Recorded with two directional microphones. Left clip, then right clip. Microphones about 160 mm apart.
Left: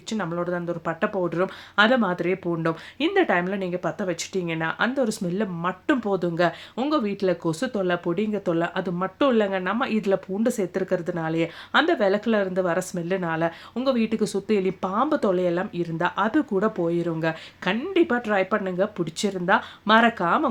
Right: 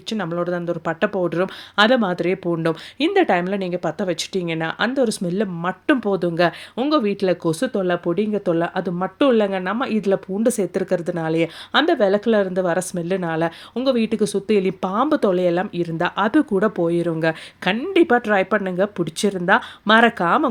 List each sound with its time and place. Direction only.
0.1 s speech: 35° right (ahead or behind)